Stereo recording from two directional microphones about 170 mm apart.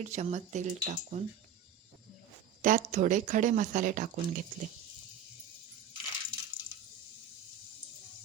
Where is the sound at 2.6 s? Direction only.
50° right (ahead or behind).